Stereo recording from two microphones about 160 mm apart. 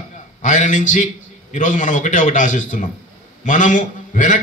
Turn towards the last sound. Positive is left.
turn(degrees=50)  # may be behind; listen again after turning